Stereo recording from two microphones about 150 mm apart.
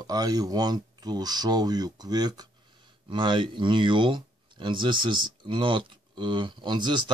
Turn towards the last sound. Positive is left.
turn(degrees=-30)  # may be behind; listen again after turning